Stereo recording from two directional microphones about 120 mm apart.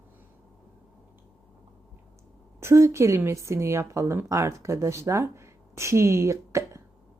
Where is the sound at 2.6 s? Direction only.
25° right (ahead or behind).